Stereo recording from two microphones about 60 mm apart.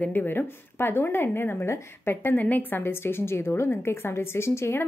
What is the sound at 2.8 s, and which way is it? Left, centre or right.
A woman's voice, left.